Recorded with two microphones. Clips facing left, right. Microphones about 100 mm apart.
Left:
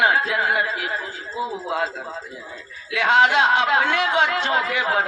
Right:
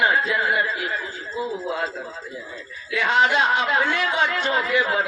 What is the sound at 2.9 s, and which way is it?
A man's voice, 65° left (ahead or behind).